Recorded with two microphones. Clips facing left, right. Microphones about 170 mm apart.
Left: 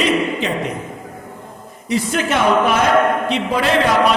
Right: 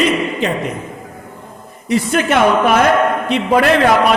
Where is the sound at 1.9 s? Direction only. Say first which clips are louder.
Right 4 dB; 60° right (ahead or behind).